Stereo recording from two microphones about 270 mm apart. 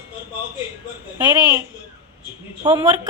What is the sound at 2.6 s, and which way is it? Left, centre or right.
Speech, centre.